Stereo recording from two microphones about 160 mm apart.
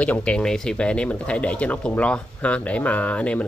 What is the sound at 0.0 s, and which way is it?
Speech, 10° left (ahead or behind).